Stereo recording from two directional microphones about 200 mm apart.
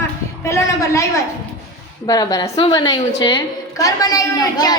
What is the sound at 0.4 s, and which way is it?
A woman's voice, 15° left (ahead or behind).